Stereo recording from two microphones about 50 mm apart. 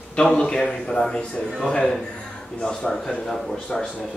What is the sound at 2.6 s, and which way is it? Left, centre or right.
A man's voice, centre.